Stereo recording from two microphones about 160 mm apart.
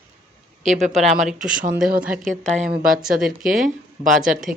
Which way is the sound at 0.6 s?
45° right (ahead or behind).